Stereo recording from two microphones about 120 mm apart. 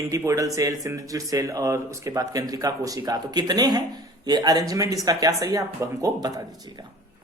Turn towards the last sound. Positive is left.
turn(degrees=-30)  # may be behind; listen again after turning